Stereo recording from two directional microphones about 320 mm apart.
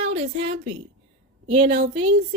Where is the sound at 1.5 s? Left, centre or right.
Centre.